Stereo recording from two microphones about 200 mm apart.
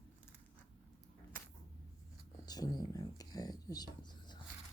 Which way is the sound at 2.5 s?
20° left (ahead or behind).